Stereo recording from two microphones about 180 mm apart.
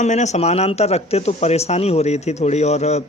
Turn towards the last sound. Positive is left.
turn(degrees=40)  # may be behind; listen again after turning